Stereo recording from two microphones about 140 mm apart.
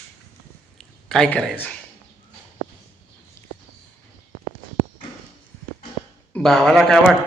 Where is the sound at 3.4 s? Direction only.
20° left (ahead or behind).